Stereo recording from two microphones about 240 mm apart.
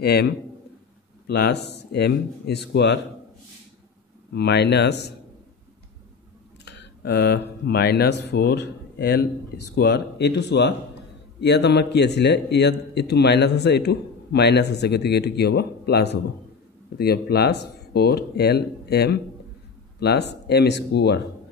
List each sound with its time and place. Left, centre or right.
0.0 s a man's voice: left
4.3 s a man's voice: left
6.6 s a man's voice: left